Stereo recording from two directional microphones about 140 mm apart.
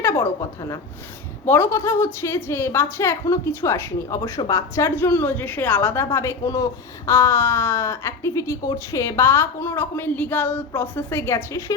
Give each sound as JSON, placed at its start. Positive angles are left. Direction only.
{"t": 0.0, "sound": "a woman's voice", "side_deg": 20}